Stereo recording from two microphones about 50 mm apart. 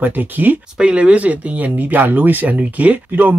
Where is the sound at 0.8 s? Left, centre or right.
Right.